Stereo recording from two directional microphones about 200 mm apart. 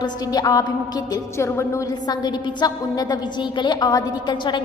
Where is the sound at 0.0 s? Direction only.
20° left (ahead or behind).